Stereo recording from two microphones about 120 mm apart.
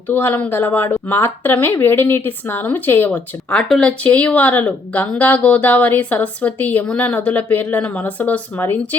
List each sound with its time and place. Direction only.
0.1 s speech: 15° left (ahead or behind)